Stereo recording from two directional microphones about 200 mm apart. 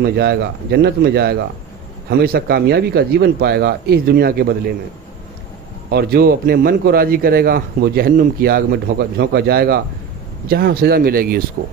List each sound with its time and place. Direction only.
0.0 s a man's voice: 55° right (ahead or behind)
5.9 s a man's voice: 50° right (ahead or behind)